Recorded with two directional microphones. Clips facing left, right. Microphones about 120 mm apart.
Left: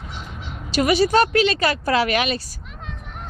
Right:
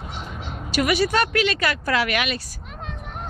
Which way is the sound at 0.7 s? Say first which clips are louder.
Left 3 dB; 30° left (ahead or behind).